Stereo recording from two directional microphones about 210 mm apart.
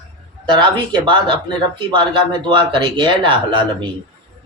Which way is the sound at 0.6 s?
25° right (ahead or behind).